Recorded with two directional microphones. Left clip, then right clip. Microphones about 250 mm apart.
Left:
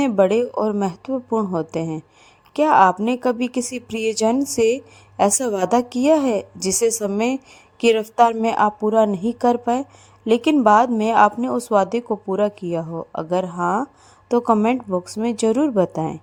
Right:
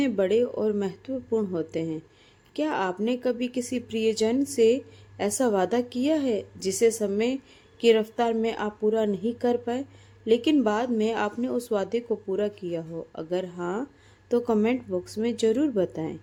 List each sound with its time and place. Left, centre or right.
0.0 s a woman's voice: left